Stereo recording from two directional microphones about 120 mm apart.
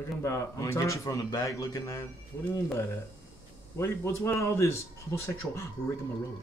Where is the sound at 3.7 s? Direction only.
25° left (ahead or behind).